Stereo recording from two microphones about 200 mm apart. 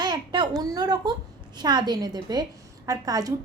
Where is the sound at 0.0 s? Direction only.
20° right (ahead or behind).